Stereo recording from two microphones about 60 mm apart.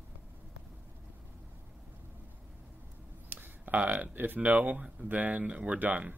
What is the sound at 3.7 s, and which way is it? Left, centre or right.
Speech, right.